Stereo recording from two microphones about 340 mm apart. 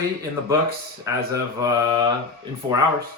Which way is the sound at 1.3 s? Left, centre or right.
Centre.